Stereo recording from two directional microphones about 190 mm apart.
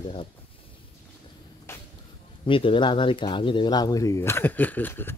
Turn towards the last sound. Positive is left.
turn(degrees=10)  # may be behind; listen again after turning